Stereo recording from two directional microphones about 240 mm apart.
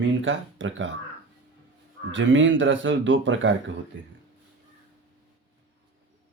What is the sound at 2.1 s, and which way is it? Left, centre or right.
Speech, right.